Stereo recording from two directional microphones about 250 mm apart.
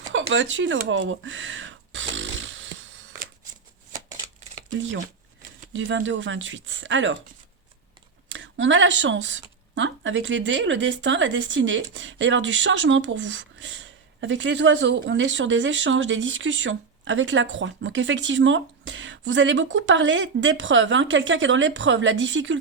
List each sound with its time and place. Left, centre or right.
0.1 s a sound: right
5.7 s speech: right
8.3 s speech: right